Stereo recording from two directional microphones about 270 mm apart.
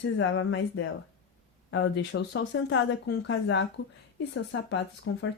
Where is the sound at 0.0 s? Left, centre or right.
Left.